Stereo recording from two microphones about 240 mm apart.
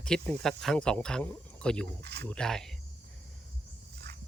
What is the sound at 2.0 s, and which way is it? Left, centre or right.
Speech, right.